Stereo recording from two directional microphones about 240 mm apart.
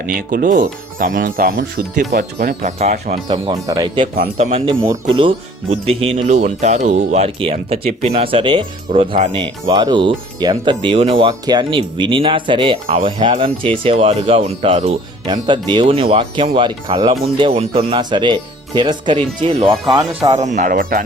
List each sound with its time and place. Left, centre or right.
0.0 s speech: right; by 4.1 s centre
4.2 s speech: right
20.3 s speech: right